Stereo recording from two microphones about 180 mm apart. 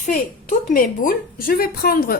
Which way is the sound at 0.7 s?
50° left (ahead or behind).